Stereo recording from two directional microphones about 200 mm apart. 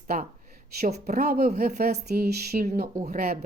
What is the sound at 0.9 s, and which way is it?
Speech, 50° right (ahead or behind).